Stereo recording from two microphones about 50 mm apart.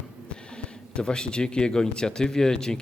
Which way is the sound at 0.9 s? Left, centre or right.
Centre.